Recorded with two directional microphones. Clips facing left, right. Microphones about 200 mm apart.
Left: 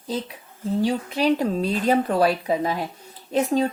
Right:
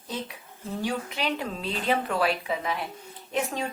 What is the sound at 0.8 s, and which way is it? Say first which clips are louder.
A woman's voice: left 7 dB; 35° left (ahead or behind).